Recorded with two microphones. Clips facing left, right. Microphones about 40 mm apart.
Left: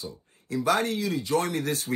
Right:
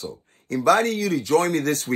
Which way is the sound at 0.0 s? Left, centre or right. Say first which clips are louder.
Right 5 dB; right.